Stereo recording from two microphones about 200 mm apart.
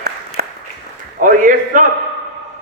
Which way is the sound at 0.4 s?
50° right (ahead or behind).